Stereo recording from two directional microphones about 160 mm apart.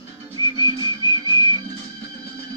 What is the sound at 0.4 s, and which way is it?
Music, 25° left (ahead or behind).